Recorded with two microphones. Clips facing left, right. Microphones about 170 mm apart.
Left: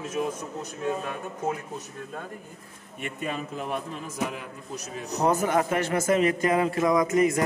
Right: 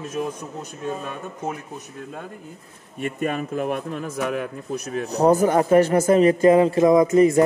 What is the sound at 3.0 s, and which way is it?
A man's voice, 55° right (ahead or behind).